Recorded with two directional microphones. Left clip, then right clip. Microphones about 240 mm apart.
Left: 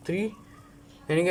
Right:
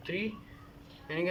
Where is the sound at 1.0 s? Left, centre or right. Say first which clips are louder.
Left 8 dB; left.